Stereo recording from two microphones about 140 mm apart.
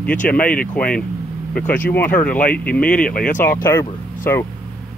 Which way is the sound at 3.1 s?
90° left.